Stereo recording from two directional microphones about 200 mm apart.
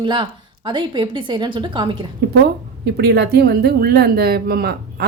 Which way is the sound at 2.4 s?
55° right (ahead or behind).